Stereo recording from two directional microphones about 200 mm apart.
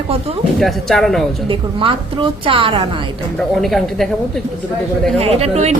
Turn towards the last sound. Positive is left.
turn(degrees=-30)  # may be behind; listen again after turning